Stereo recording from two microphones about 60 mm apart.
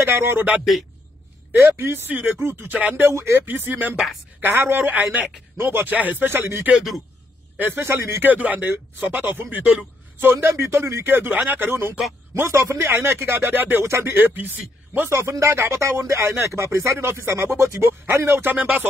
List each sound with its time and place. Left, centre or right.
0.0 s speech: right
2.0 s speech: right
3.1 s speech: right
3.4 s speech: right
6.7 s speech: centre
7.5 s speech: right
8.3 s speech: right
10.3 s speech: right
11.1 s speech: right
12.4 s speech: right
13.8 s speech: right
15.0 s speech: right
16.2 s speech: right
18.3 s speech: right